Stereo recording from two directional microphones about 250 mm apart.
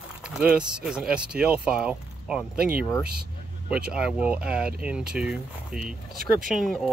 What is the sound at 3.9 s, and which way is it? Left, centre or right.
Speech, centre.